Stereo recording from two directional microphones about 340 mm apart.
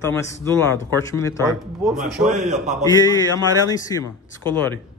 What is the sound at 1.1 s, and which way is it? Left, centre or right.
Speech, centre.